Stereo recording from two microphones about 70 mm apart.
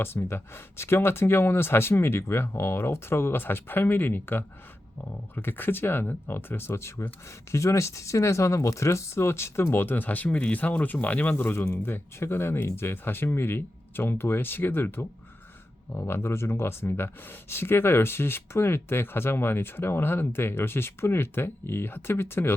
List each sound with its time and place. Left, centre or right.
0.0 s speech: left